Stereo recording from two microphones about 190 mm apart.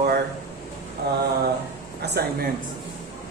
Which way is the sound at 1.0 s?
60° right (ahead or behind).